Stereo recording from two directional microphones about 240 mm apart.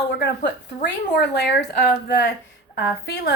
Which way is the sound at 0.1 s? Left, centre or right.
Left.